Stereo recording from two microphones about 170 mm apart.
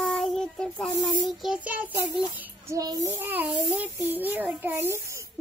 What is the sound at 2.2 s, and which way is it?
A child's voice, 20° right (ahead or behind).